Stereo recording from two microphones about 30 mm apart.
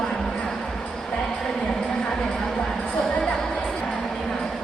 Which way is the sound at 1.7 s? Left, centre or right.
Left.